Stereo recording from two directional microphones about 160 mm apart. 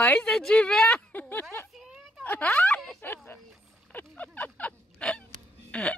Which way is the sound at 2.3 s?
10° left (ahead or behind).